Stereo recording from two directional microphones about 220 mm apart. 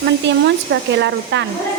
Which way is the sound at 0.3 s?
55° right (ahead or behind).